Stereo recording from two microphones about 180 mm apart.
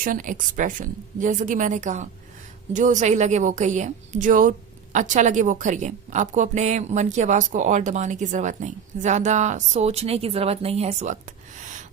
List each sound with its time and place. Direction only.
0.0 s a woman's voice: 50° right (ahead or behind)